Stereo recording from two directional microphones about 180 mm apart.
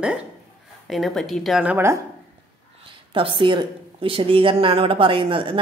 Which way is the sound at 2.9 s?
30° right (ahead or behind).